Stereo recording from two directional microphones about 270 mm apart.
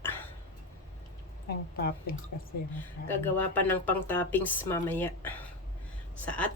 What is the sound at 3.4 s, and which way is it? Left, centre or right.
A woman's voice, centre.